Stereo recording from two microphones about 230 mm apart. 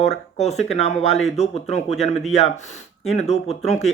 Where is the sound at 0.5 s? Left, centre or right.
Centre.